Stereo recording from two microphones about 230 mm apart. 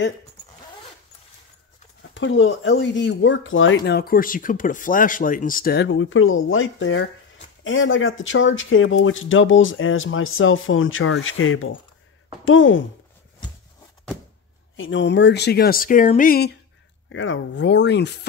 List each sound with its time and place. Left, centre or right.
2.1 s speech: left
14.8 s speech: left
17.1 s speech: left